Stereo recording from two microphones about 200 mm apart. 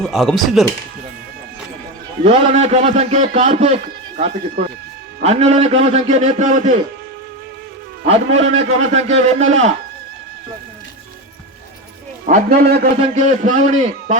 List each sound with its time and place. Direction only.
0.0 s speech: centre (ahead or behind)
2.2 s a man's voice: 30° right (ahead or behind)
8.0 s a man's voice: 30° right (ahead or behind)
12.2 s a man's voice: 45° right (ahead or behind)
12.8 s a man's voice: 35° right (ahead or behind)